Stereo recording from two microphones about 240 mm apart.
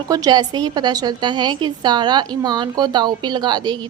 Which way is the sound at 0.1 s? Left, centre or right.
Centre.